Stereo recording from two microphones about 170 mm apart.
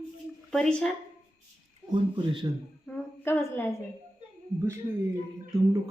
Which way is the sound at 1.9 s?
30° right (ahead or behind).